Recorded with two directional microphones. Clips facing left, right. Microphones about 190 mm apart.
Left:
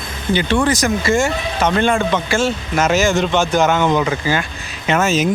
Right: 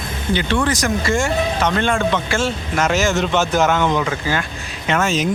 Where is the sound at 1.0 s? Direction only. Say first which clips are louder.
Left 1 dB; 5° left (ahead or behind).